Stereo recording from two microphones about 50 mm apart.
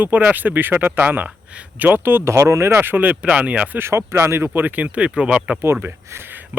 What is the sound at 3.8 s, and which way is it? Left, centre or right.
Speech, right.